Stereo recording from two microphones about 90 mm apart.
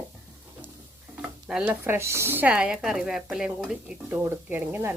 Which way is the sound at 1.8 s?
30° right (ahead or behind).